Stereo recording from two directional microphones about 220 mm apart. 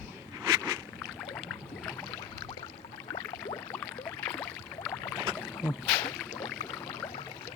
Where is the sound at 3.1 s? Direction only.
20° left (ahead or behind).